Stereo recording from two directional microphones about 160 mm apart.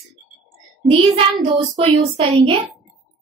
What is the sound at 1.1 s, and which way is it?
Child singing, 35° right (ahead or behind).